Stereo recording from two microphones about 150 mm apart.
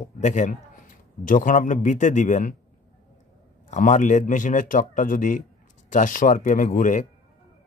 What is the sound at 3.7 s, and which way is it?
Speech, 55° left (ahead or behind).